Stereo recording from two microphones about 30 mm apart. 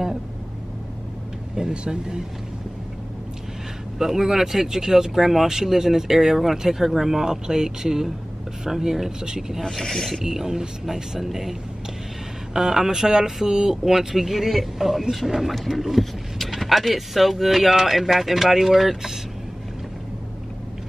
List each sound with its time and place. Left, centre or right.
1.5 s speech: right
4.0 s speech: centre
9.6 s speech: centre
10.2 s speech: centre
10.9 s speech: centre
12.5 s speech: centre
15.5 s speech: centre
16.0 s a sound: centre
16.5 s speech: centre